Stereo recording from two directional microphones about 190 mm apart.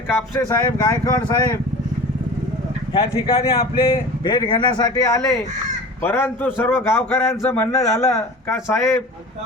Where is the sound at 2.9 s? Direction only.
25° left (ahead or behind); by 9.0 s 10° left (ahead or behind).